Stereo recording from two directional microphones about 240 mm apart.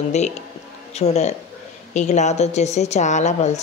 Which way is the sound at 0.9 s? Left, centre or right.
Left.